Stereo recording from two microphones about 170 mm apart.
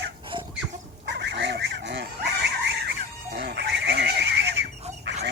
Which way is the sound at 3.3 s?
80° right.